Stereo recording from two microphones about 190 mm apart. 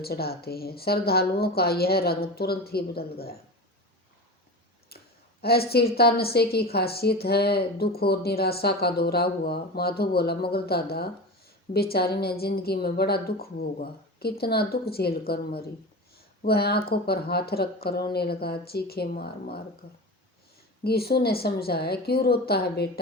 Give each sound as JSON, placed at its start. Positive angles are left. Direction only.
{"t": 0.0, "sound": "a woman's voice", "side_deg": 55}
{"t": 4.9, "sound": "a woman's voice", "side_deg": 55}
{"t": 20.8, "sound": "a woman's voice", "side_deg": 55}